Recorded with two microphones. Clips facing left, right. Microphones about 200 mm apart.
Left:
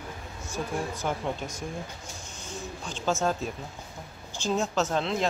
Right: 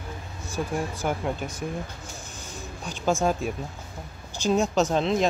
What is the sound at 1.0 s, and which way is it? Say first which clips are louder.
Speech: right 3 dB; 10° right (ahead or behind).